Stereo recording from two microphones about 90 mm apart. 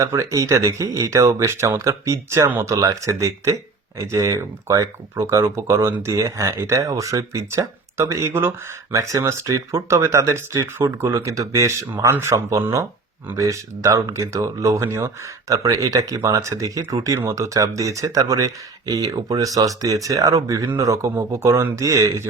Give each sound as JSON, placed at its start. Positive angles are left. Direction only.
{"t": 0.0, "sound": "speech", "side_deg": -35}